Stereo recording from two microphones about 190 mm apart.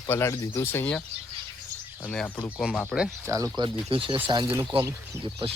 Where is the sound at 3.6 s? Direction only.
25° right (ahead or behind).